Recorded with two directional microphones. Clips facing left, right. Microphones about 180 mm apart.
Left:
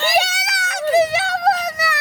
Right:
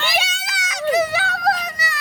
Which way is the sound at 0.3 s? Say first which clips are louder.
Left 4 dB; 70° left (ahead or behind).